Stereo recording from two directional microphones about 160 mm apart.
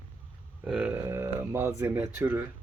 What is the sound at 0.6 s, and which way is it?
Speech, 10° right (ahead or behind).